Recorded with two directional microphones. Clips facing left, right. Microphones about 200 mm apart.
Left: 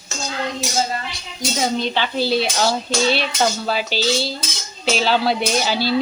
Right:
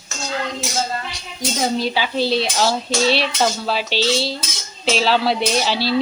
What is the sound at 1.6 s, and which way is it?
Speech, 5° right (ahead or behind).